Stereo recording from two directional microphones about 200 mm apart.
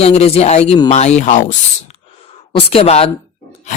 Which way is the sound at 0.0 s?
30° left (ahead or behind).